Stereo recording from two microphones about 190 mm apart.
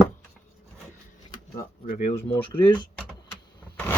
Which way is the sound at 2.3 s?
25° left (ahead or behind).